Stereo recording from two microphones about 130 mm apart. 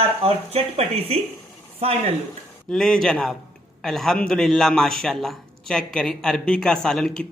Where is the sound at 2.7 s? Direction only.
5° left (ahead or behind).